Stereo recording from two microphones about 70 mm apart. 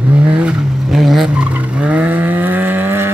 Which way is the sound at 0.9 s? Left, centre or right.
Centre.